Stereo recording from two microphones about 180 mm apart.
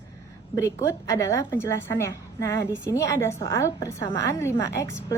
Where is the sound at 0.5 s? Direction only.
15° left (ahead or behind).